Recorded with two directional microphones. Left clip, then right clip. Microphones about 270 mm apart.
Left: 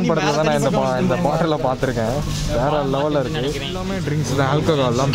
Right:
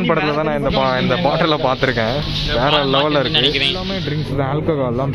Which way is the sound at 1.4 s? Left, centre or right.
Centre.